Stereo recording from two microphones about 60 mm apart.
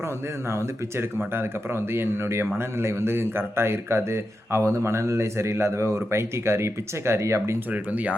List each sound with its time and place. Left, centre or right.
0.5 s speech: right
7.7 s speech: right